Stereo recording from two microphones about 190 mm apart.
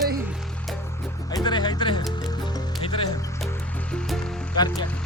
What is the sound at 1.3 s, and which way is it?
Speech, 25° left (ahead or behind).